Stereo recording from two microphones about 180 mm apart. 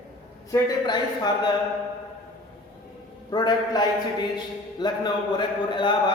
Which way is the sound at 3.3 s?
25° left (ahead or behind).